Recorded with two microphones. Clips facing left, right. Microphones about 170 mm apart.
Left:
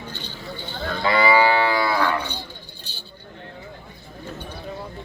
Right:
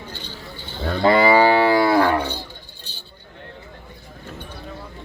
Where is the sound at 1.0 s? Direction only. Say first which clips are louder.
Right 4 dB; 45° right (ahead or behind).